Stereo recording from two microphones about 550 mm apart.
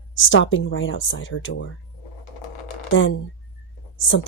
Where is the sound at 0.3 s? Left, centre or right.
Left.